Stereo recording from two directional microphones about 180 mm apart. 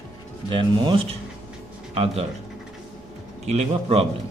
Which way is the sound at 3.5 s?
35° right (ahead or behind).